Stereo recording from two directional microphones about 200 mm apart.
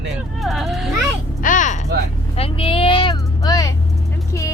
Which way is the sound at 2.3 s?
30° left (ahead or behind).